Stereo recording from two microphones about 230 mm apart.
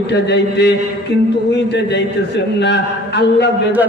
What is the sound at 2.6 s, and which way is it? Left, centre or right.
Speech, left.